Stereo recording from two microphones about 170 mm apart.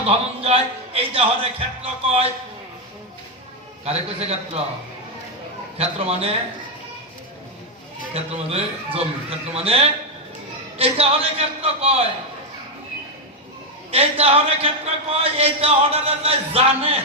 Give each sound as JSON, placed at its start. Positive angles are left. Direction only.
{"t": 0.1, "sound": "speech", "side_deg": -35}
{"t": 3.8, "sound": "speech", "side_deg": -35}
{"t": 5.7, "sound": "speech", "side_deg": -35}
{"t": 8.1, "sound": "speech", "side_deg": -35}
{"t": 13.9, "sound": "speech", "side_deg": -35}